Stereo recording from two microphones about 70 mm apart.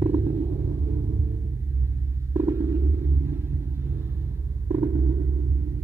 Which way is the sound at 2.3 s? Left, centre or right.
Right.